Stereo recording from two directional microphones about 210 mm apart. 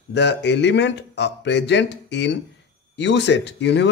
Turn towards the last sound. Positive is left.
turn(degrees=55)  # may be behind; listen again after turning